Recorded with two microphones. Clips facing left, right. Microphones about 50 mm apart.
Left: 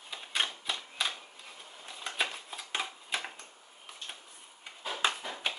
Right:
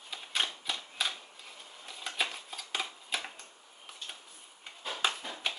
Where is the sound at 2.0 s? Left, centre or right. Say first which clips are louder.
Left 1 dB; centre.